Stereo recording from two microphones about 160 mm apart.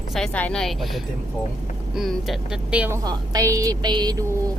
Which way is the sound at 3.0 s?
25° right (ahead or behind).